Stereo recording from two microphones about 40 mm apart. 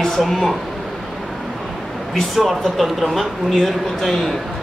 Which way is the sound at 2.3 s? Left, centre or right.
Centre.